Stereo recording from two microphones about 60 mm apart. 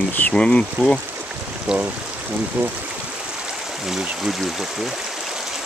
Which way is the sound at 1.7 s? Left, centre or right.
Centre.